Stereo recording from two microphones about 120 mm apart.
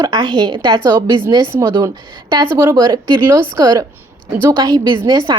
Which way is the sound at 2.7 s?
35° right (ahead or behind).